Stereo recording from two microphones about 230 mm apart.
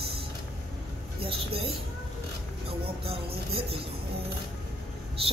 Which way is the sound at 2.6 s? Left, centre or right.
Right.